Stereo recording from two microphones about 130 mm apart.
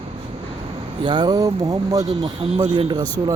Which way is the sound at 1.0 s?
35° right (ahead or behind).